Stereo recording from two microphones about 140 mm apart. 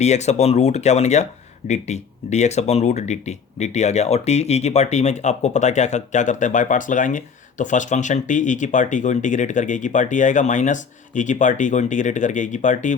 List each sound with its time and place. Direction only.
0.0 s speech: 50° left (ahead or behind)